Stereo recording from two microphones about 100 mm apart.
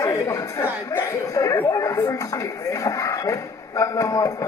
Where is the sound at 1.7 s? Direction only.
35° left (ahead or behind).